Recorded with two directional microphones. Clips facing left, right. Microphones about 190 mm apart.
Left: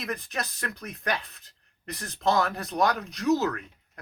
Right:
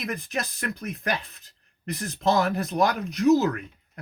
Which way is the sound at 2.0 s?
5° right (ahead or behind).